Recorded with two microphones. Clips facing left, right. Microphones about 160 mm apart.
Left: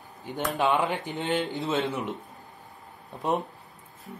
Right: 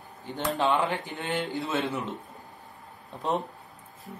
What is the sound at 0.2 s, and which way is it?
Speech, 15° left (ahead or behind).